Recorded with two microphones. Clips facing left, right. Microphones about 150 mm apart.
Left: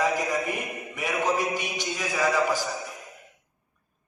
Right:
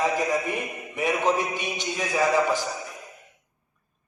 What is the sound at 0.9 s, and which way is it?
Speech, 20° right (ahead or behind).